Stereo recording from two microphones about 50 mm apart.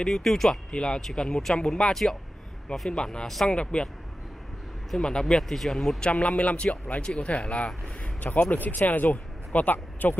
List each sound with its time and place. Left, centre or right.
0.0 s speech: centre
0.7 s speech: centre
3.3 s speech: centre
3.5 s speech: left
4.9 s speech: centre
5.2 s speech: centre
5.9 s speech: left